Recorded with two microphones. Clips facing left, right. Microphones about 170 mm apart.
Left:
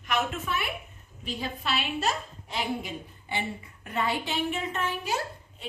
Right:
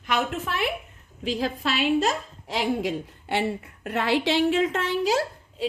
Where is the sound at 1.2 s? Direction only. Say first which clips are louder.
Right 8 dB; 90° right.